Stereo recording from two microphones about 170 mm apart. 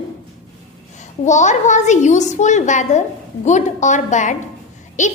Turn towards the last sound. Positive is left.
turn(degrees=45)  # may be behind; listen again after turning